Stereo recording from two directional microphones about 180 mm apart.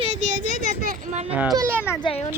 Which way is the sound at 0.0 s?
40° right (ahead or behind).